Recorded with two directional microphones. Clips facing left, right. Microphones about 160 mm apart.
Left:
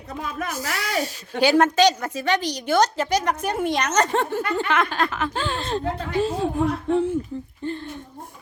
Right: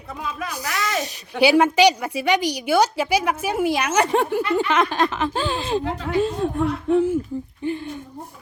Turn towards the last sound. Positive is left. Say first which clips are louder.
# right 3 dB
turn(degrees=-10)  # may be behind; listen again after turning